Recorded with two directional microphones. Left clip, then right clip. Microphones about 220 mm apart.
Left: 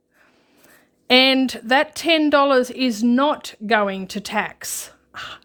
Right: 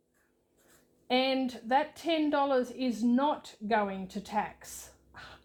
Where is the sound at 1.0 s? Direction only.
50° left (ahead or behind).